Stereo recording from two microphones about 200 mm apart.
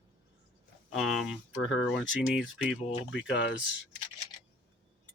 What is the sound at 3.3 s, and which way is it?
Speech, 65° left (ahead or behind).